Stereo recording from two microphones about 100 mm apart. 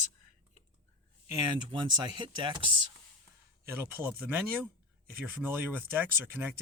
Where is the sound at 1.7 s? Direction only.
50° right (ahead or behind).